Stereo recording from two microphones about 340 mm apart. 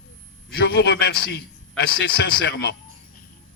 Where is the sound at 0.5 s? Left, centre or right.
Left.